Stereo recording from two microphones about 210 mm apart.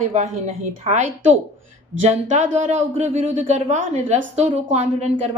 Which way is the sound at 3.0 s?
35° right (ahead or behind).